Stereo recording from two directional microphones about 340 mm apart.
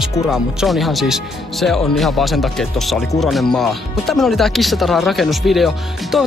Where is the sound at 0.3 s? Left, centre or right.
Centre.